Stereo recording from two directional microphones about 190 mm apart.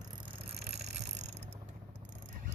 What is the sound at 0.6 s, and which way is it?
Vehicle, 60° right (ahead or behind).